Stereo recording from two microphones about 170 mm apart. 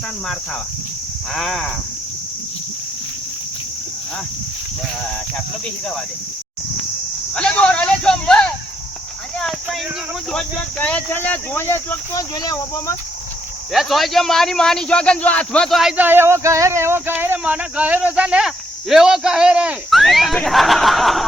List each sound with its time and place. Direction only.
1.3 s a man's voice: centre (ahead or behind)
7.3 s a sound: 5° left (ahead or behind)
10.3 s speech: 10° left (ahead or behind)
13.7 s a man's voice: centre (ahead or behind)